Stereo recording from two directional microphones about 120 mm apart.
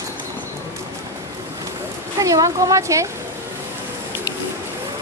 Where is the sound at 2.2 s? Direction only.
30° right (ahead or behind).